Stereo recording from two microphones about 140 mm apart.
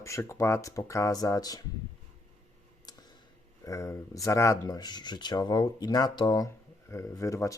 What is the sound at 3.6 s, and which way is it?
Speech, 20° left (ahead or behind).